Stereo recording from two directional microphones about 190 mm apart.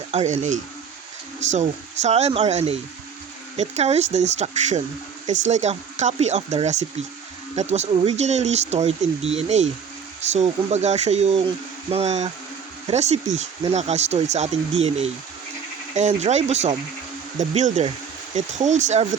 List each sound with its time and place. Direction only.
0.1 s speech: 35° right (ahead or behind)